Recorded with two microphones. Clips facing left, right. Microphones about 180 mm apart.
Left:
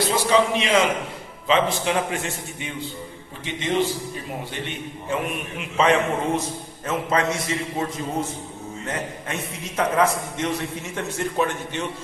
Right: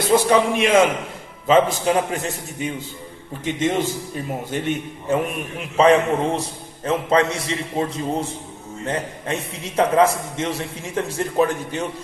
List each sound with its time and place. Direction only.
0.2 s a man's voice: 50° right (ahead or behind)